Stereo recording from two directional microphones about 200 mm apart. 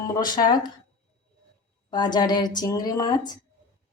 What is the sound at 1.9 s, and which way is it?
A woman's voice, 20° left (ahead or behind).